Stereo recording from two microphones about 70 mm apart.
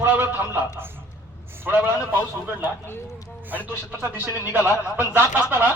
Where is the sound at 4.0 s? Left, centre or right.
Right.